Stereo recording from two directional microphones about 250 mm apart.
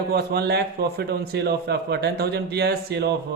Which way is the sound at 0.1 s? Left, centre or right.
Right.